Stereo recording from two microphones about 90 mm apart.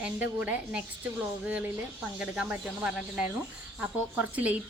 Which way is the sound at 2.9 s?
10° right (ahead or behind).